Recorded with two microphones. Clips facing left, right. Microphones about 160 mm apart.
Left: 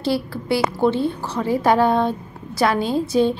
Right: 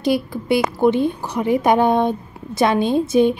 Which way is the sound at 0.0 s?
15° right (ahead or behind).